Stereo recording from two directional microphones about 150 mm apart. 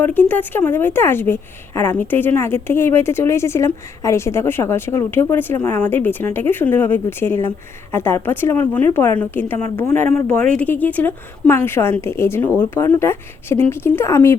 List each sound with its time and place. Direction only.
0.0 s a woman's voice: 10° left (ahead or behind)